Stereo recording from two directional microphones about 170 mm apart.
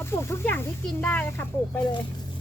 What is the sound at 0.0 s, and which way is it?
Speech, 15° left (ahead or behind).